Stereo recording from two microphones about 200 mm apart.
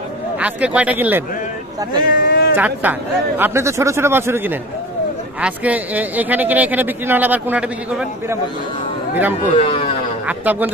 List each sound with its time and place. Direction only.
0.4 s speech: 5° right (ahead or behind)
2.0 s a sound: 45° left (ahead or behind)
2.5 s speech: 10° right (ahead or behind)
9.6 s a man's voice: 30° left (ahead or behind)
10.2 s speech: 10° right (ahead or behind)